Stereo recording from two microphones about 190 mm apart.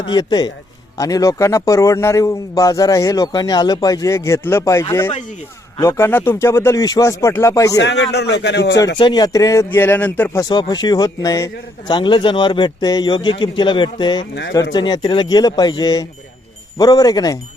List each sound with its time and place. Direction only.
0.1 s a man's voice: 20° left (ahead or behind)
7.8 s a man's voice: 65° left (ahead or behind)
9.0 s a man's voice: 25° left (ahead or behind)
10.5 s speech: 20° left (ahead or behind)